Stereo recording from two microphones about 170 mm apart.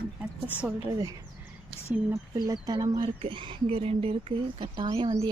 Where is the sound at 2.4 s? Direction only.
25° right (ahead or behind).